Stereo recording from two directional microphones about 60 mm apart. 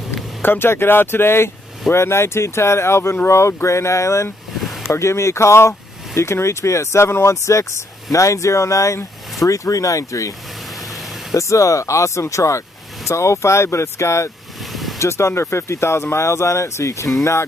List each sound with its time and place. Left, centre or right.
0.4 s speech: left
11.3 s speech: left
14.7 s vehicle: centre
15.0 s speech: left